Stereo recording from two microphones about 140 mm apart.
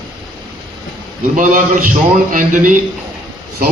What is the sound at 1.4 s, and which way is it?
Speech, 70° right (ahead or behind).